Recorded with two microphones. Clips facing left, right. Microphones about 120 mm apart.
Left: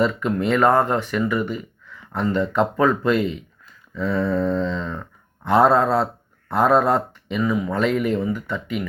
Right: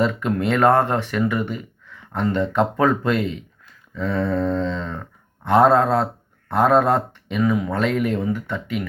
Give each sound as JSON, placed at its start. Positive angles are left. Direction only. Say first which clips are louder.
{"t": 0.0, "sound": "speech", "louder": "even", "side_deg": -50}